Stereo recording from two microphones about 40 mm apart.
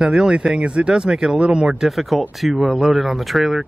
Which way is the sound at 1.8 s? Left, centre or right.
Centre.